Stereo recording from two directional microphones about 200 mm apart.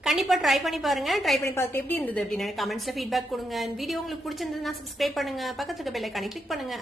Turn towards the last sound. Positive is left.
turn(degrees=0)  # may be behind; listen again after turning